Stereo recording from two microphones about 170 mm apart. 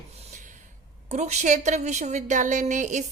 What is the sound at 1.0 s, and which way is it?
A woman's voice, 40° right (ahead or behind).